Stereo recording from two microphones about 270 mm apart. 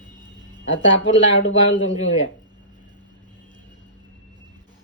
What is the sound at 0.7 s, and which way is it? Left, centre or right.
Speech, left.